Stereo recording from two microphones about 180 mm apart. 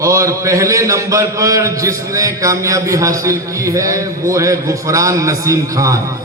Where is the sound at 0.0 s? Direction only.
15° right (ahead or behind).